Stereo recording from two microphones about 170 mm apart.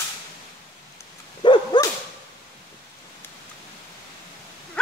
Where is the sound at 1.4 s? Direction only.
25° left (ahead or behind).